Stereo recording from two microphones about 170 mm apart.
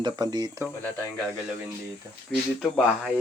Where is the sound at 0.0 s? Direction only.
25° right (ahead or behind).